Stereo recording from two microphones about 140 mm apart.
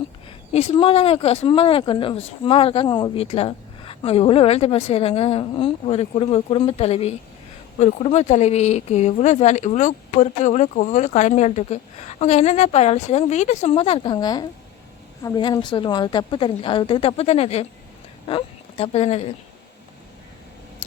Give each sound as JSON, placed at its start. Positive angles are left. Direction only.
{"t": 0.3, "sound": "a woman's voice", "side_deg": 50}